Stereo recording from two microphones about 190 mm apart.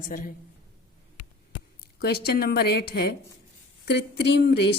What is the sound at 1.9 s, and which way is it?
A woman's voice, 55° left (ahead or behind).